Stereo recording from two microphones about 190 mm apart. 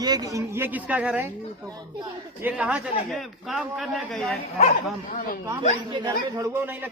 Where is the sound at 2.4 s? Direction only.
5° right (ahead or behind).